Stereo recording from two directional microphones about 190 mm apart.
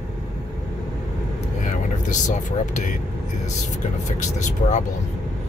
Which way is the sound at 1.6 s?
40° left (ahead or behind).